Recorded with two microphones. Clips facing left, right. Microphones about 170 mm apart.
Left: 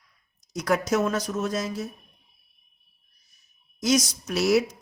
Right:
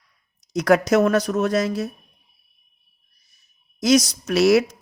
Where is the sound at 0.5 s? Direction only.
75° right (ahead or behind).